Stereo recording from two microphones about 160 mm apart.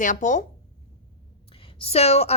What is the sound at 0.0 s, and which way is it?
Speech, 55° left (ahead or behind).